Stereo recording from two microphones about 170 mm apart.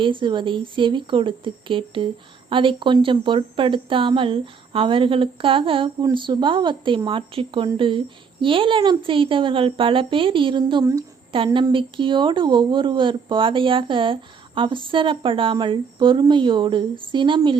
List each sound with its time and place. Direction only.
0.0 s a woman's voice: 30° right (ahead or behind)